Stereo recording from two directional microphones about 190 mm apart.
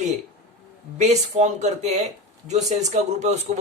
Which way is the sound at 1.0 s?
35° right (ahead or behind).